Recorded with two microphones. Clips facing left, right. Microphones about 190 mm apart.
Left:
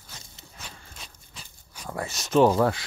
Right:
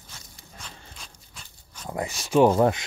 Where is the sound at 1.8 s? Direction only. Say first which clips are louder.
Right 2 dB; 20° right (ahead or behind).